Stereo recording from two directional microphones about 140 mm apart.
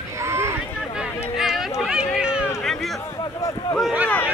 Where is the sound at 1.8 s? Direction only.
5° right (ahead or behind).